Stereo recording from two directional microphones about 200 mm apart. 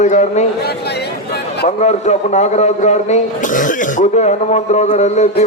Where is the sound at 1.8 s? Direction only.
35° left (ahead or behind).